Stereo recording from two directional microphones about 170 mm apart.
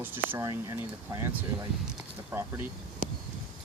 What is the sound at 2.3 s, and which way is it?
Speech, 15° right (ahead or behind).